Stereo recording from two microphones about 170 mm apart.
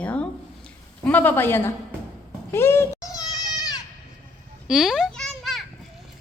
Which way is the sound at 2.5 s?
15° left (ahead or behind).